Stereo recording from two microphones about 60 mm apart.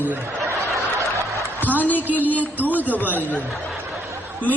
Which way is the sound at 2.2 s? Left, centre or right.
Left.